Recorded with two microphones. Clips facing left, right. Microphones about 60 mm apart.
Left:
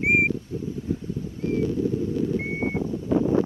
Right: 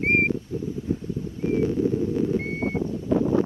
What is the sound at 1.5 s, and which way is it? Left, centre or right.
Horse, right.